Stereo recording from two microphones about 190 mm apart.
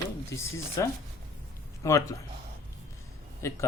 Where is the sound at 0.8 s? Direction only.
15° left (ahead or behind).